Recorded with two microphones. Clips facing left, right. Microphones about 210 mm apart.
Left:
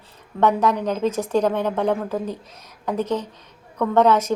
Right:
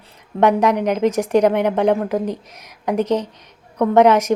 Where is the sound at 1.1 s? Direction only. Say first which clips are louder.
Right 4 dB; 80° right.